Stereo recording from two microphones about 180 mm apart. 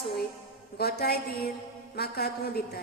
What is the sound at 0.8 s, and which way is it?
Music, 60° left (ahead or behind).